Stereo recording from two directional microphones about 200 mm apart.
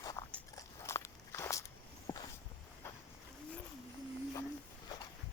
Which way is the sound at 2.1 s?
20° left (ahead or behind).